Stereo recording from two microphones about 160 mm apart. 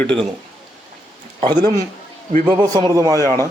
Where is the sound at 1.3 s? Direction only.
30° right (ahead or behind).